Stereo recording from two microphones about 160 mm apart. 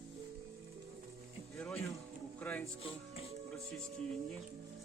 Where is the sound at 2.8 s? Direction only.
35° left (ahead or behind).